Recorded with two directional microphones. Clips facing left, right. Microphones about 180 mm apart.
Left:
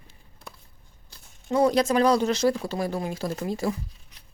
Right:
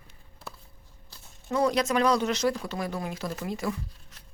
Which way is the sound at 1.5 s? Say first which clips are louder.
Left 4 dB; 30° left (ahead or behind).